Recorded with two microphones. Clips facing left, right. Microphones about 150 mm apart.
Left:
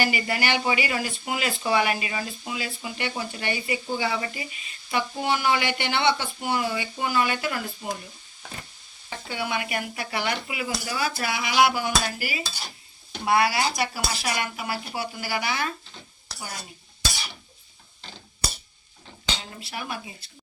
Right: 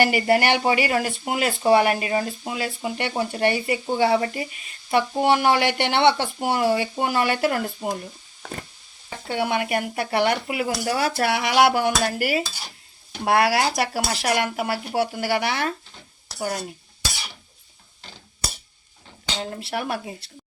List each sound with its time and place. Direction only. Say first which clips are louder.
0.0 s speech: right 7 dB; 55° right (ahead or behind)
9.2 s speech: right 6 dB; 55° right (ahead or behind)
13.2 s speech: right 3 dB; 80° right; by 15.7 s 65° right (ahead or behind)
19.4 s speech: right 8 dB; 55° right (ahead or behind)